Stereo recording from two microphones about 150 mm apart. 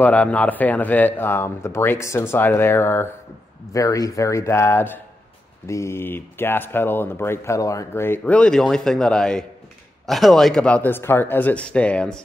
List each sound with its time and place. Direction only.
0.0 s speech: 10° left (ahead or behind)